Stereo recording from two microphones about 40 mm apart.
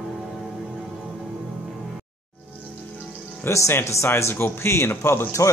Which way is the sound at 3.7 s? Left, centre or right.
Left.